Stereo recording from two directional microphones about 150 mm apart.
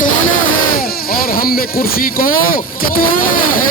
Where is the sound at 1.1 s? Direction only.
80° left.